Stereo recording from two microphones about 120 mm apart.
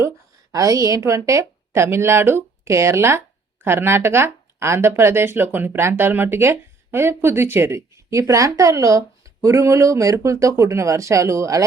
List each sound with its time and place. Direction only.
0.5 s a woman's voice: 30° right (ahead or behind)